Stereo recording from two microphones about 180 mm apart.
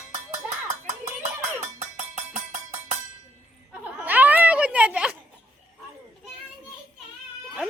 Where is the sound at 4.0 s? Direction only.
10° right (ahead or behind).